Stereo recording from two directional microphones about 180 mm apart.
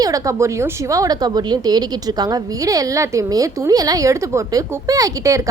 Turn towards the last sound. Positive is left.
turn(degrees=-20)  # may be behind; listen again after turning